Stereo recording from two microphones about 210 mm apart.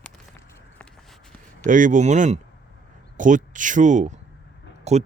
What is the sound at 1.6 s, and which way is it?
Speech, 40° right (ahead or behind).